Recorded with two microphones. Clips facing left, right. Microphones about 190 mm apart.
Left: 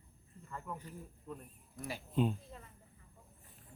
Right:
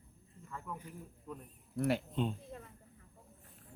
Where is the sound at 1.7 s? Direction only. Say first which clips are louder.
Right 12 dB; 65° right (ahead or behind).